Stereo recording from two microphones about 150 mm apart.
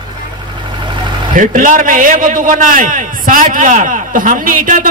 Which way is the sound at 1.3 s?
60° right (ahead or behind).